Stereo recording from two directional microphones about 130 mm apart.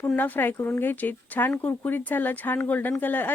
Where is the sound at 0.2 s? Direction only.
15° left (ahead or behind).